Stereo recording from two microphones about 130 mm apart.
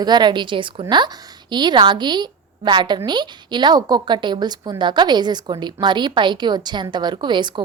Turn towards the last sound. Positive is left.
turn(degrees=-35)  # may be behind; listen again after turning